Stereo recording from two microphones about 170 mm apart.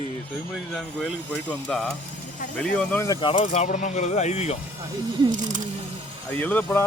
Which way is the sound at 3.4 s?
45° left (ahead or behind).